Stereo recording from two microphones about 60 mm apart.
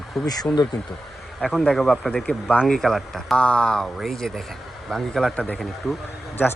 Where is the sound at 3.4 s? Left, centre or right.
Centre.